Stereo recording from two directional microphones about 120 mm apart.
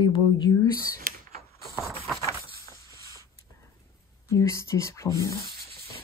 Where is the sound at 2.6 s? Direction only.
25° left (ahead or behind).